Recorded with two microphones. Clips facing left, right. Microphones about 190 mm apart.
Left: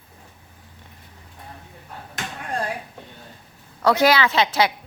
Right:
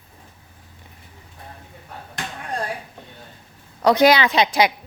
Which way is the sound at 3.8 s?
20° right (ahead or behind).